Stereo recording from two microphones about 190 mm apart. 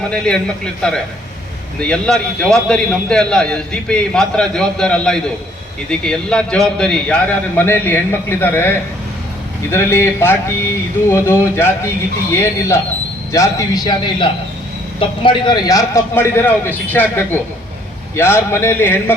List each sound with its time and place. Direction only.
0.1 s a man's voice: 5° left (ahead or behind)